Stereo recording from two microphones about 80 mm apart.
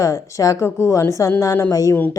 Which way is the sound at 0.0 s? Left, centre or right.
Left.